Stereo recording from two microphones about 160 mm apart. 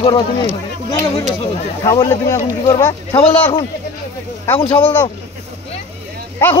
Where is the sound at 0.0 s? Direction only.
30° left (ahead or behind).